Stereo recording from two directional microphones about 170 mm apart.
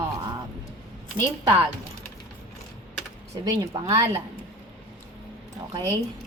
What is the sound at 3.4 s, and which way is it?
Speech, 25° right (ahead or behind).